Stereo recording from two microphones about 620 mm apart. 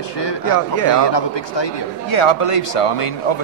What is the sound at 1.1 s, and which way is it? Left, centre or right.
Speech, left.